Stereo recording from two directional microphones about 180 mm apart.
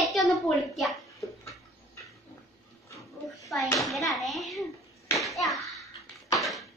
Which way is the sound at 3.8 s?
Centre (ahead or behind).